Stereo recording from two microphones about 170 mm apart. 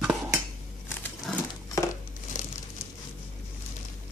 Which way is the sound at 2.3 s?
45° left (ahead or behind).